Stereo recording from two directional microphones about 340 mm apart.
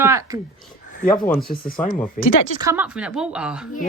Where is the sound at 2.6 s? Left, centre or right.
Centre.